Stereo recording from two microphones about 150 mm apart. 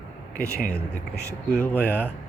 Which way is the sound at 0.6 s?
10° left (ahead or behind).